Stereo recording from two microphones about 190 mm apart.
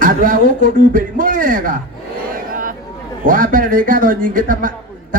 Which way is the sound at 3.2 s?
45° right (ahead or behind).